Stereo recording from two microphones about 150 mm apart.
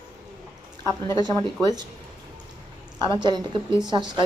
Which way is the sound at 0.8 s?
20° left (ahead or behind).